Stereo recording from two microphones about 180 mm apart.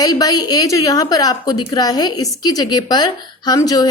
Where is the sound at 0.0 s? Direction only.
20° left (ahead or behind).